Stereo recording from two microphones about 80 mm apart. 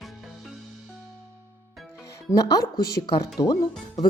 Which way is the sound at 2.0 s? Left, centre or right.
Left.